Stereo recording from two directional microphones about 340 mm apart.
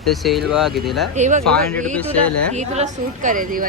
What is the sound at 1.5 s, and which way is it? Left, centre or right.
Speech, centre.